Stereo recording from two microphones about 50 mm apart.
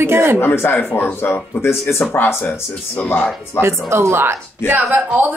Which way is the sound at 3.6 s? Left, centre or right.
Left.